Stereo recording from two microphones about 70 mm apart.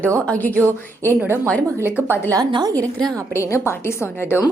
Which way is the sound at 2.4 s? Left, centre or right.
Right.